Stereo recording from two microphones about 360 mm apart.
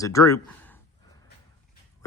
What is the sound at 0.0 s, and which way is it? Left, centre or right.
Speech, centre.